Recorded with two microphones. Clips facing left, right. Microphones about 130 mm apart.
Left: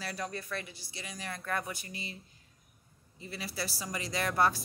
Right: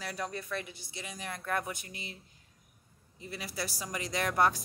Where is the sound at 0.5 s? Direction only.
15° right (ahead or behind).